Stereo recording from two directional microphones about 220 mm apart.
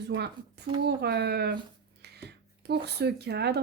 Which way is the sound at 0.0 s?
50° right (ahead or behind).